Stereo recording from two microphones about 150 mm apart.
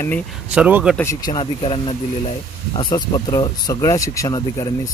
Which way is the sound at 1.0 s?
25° left (ahead or behind).